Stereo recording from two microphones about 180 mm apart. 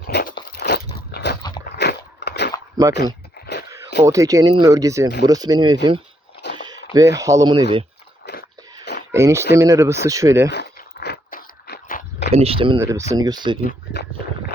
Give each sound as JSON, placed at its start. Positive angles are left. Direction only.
{"t": 0.1, "sound": "crunch", "side_deg": 60}
{"t": 1.4, "sound": "crunch", "side_deg": 20}
{"t": 1.7, "sound": "biting", "side_deg": 65}
{"t": 2.8, "sound": "speech", "side_deg": -20}
{"t": 3.3, "sound": "a sound", "side_deg": 60}
{"t": 4.0, "sound": "speech", "side_deg": -20}
{"t": 8.2, "sound": "a sound", "side_deg": 65}
{"t": 9.1, "sound": "speech", "side_deg": -15}
{"t": 10.5, "sound": "a sound", "side_deg": 65}
{"t": 12.3, "sound": "speech", "side_deg": -35}
{"t": 12.8, "sound": "speech", "side_deg": -15}
{"t": 13.6, "sound": "speech", "side_deg": 55}